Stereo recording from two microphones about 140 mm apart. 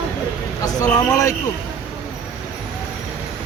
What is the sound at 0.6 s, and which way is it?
Speech, 25° left (ahead or behind).